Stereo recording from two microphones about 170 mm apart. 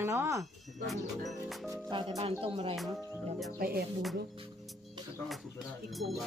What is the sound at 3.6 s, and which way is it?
Speech, 60° right (ahead or behind).